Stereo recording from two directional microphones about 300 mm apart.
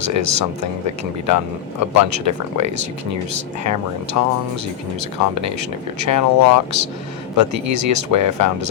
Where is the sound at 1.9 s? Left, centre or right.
Right.